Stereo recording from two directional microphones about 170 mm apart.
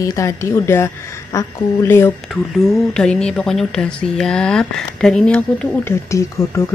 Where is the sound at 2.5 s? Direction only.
5° left (ahead or behind).